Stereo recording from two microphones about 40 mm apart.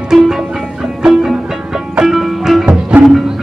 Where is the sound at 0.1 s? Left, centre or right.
Centre.